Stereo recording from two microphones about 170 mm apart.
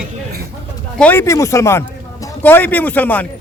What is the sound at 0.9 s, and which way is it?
A man's voice, 10° left (ahead or behind).